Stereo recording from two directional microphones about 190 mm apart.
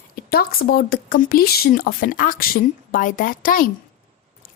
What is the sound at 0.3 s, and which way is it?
Speech, 50° left (ahead or behind).